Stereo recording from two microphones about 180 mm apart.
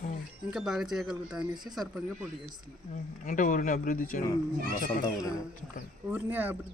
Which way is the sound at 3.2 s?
45° left (ahead or behind).